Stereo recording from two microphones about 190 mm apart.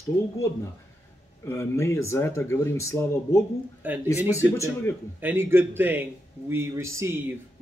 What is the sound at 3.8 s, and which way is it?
Speech, 10° right (ahead or behind).